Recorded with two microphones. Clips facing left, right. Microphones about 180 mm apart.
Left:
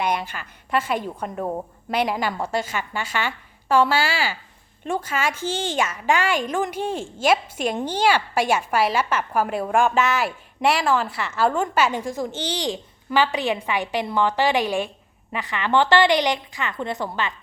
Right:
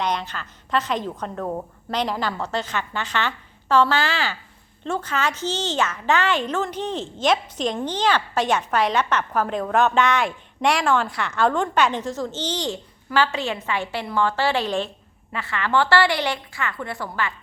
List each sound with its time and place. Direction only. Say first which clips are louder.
0.0 s a woman's voice: left 1 dB; 10° left (ahead or behind)